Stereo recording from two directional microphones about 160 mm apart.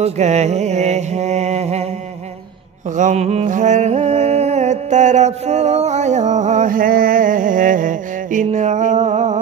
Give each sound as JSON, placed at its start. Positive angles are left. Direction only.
{"t": 0.0, "sound": "mantra", "side_deg": -45}
{"t": 3.0, "sound": "mantra", "side_deg": -50}